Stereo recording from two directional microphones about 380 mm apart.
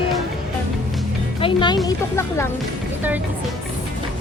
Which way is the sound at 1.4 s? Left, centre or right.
Centre.